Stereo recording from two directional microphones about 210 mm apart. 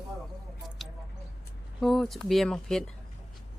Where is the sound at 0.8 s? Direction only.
Centre (ahead or behind).